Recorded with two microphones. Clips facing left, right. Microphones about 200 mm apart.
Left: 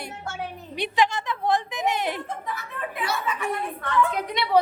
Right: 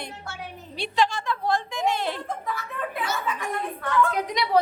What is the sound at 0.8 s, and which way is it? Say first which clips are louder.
A woman's voice: left 1 dB; 20° left (ahead or behind).